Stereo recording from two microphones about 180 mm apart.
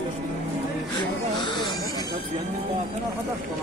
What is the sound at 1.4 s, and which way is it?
Snake, 25° left (ahead or behind).